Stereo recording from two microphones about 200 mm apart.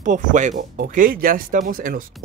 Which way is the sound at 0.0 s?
40° right (ahead or behind).